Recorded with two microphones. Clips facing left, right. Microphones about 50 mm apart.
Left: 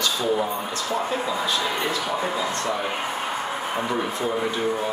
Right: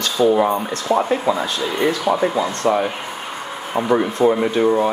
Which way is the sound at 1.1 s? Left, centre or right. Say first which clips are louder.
Right 7 dB; right.